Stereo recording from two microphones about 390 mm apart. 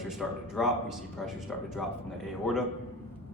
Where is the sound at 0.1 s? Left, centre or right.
Centre.